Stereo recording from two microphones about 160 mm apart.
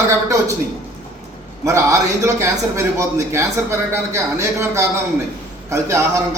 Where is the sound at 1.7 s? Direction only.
20° right (ahead or behind).